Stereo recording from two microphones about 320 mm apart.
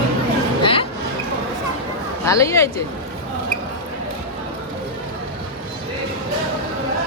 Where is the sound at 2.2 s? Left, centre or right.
Centre.